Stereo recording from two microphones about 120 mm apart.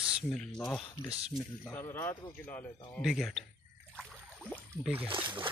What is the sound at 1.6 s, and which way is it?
Speech, 20° left (ahead or behind).